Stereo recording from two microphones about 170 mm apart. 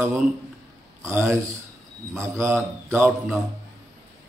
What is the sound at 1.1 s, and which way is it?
Speech, 15° right (ahead or behind).